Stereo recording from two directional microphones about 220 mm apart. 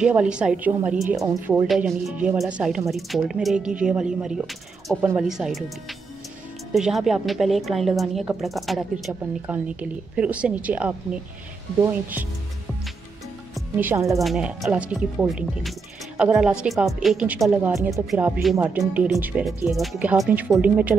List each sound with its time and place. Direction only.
0.0 s a woman's voice: 5° right (ahead or behind)
1.2 s speech: 15° right (ahead or behind)
1.7 s a woman's voice: centre (ahead or behind)
6.7 s a woman's voice: centre (ahead or behind)
13.6 s speech: 10° right (ahead or behind)
14.2 s a woman's voice: centre (ahead or behind)